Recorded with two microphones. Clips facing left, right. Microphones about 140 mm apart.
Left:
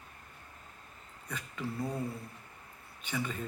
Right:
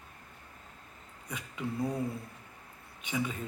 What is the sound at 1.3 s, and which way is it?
Speech, 15° right (ahead or behind).